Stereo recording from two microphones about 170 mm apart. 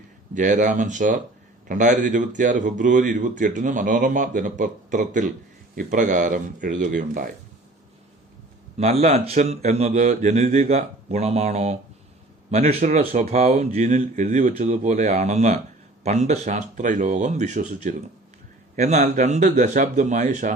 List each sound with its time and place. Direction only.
0.3 s a man's voice: 45° right (ahead or behind)
8.8 s a man's voice: 40° right (ahead or behind)